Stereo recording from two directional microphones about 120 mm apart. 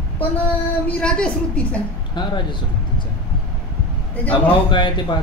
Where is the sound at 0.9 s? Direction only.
10° left (ahead or behind).